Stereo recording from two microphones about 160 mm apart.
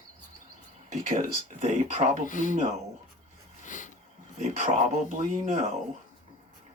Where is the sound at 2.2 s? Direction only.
55° left (ahead or behind).